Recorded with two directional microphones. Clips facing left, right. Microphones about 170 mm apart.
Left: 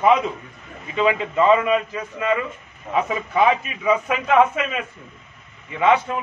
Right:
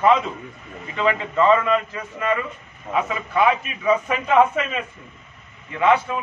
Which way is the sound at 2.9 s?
20° left (ahead or behind).